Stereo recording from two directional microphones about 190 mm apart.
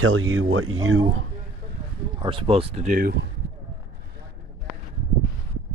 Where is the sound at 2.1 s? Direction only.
25° right (ahead or behind); by 3.2 s 50° right (ahead or behind).